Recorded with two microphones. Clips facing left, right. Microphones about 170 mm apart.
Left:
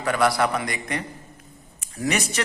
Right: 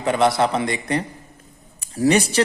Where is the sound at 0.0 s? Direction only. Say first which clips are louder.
Right 3 dB; 25° right (ahead or behind).